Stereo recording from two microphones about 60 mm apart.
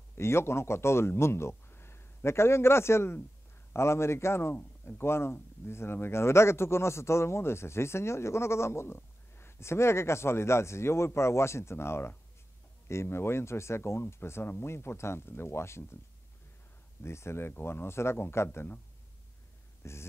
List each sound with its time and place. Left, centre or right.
0.2 s speech: left
17.0 s speech: left
19.8 s a sound: left